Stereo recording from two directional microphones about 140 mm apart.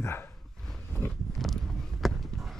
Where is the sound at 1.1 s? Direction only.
Centre (ahead or behind).